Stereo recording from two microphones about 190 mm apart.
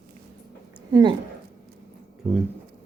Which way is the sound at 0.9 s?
25° right (ahead or behind).